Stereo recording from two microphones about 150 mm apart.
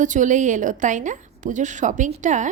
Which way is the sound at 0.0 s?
55° right (ahead or behind).